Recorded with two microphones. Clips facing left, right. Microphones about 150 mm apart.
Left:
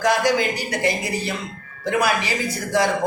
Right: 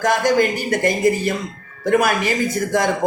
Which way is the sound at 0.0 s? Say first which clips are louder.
Right 3 dB; 50° right (ahead or behind).